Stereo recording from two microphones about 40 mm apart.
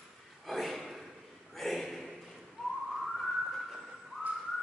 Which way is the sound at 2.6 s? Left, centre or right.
Centre.